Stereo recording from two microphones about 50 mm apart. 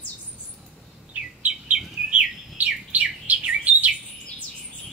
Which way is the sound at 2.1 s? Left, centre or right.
Right.